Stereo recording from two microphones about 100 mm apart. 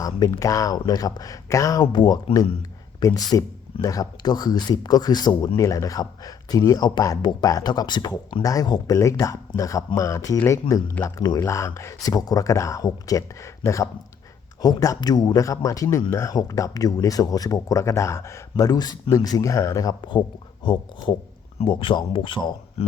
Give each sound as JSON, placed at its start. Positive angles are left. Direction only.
{"t": 0.0, "sound": "speech", "side_deg": 35}
{"t": 1.8, "sound": "speech", "side_deg": 45}
{"t": 3.0, "sound": "speech", "side_deg": 35}
{"t": 5.5, "sound": "speech", "side_deg": 30}
{"t": 22.8, "sound": "a sound", "side_deg": 90}